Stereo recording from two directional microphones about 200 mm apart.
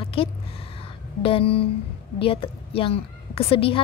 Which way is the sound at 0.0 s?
25° left (ahead or behind).